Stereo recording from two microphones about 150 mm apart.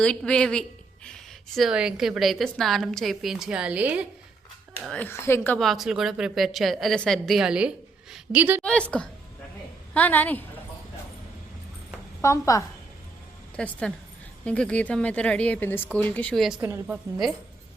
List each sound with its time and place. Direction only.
0.0 s a woman's voice: 5° left (ahead or behind); by 4.0 s 10° right (ahead or behind)
4.8 s a woman's voice: 5° left (ahead or behind)
5.5 s a woman's voice: centre (ahead or behind)
8.6 s a woman's voice: 10° left (ahead or behind)
12.2 s a woman's voice: 20° left (ahead or behind)
13.6 s a woman's voice: 5° left (ahead or behind)
16.6 s a woman's voice: 15° right (ahead or behind)